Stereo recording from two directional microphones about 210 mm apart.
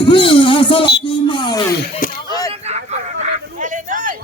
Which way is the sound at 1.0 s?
25° left (ahead or behind).